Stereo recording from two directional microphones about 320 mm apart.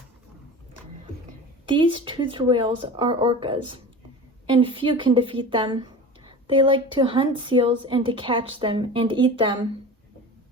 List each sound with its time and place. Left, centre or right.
1.6 s a woman's voice: centre